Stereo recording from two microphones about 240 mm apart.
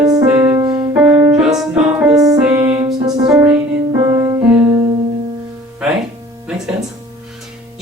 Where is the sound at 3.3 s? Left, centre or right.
Centre.